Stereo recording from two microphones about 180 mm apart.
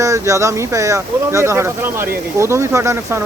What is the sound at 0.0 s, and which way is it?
Speech, 15° right (ahead or behind).